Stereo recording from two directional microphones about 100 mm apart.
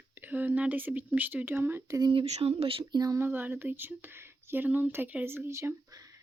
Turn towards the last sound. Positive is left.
turn(degrees=-35)  # may be behind; listen again after turning